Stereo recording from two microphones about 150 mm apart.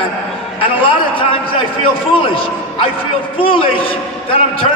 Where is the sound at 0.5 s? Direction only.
35° left (ahead or behind).